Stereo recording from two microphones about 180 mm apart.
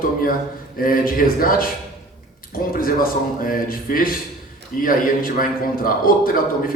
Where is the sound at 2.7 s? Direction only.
55° left (ahead or behind).